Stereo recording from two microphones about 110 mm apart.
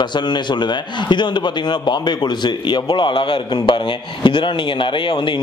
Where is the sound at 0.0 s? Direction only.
45° left (ahead or behind).